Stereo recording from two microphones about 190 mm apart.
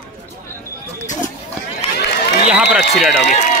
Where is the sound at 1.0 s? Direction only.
40° left (ahead or behind).